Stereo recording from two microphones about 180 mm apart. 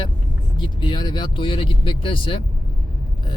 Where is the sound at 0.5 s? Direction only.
25° left (ahead or behind).